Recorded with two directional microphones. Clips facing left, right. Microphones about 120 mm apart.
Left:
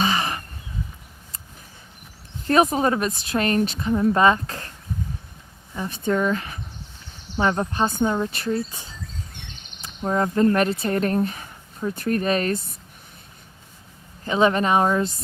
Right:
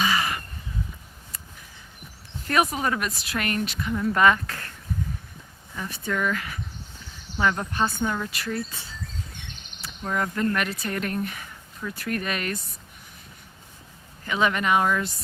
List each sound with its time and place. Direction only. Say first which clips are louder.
0.0 s a sound: left 2 dB; 25° left (ahead or behind)
2.5 s a woman's voice: left 5 dB; 30° left (ahead or behind)
5.7 s a woman's voice: left 6 dB; 25° left (ahead or behind)
9.8 s speech: left 5 dB; 25° left (ahead or behind)
14.3 s a woman's voice: left 4 dB; 30° left (ahead or behind)